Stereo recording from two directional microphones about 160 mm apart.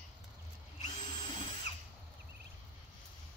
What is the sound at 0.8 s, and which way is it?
Drill, 25° left (ahead or behind).